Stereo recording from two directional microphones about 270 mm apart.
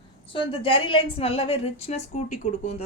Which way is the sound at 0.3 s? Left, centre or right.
Centre.